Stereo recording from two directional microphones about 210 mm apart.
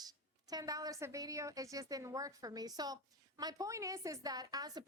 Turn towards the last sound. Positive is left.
turn(degrees=-20)  # may be behind; listen again after turning